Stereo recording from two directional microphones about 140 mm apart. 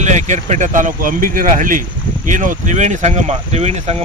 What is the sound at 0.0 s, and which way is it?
Speech, 60° right (ahead or behind).